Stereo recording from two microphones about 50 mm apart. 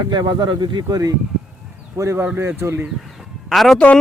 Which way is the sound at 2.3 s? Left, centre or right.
Right.